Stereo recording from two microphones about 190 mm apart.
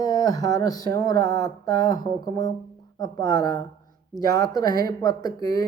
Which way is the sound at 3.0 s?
20° left (ahead or behind).